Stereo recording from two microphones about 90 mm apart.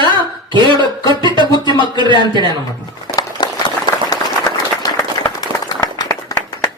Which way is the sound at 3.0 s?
50° left (ahead or behind).